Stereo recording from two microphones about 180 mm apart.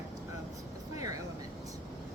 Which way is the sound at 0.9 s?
20° right (ahead or behind).